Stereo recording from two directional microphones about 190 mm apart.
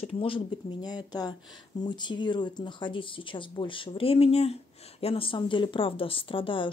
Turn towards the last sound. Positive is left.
turn(degrees=25)  # may be behind; listen again after turning